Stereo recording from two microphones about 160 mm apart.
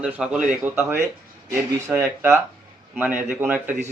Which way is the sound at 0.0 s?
5° right (ahead or behind).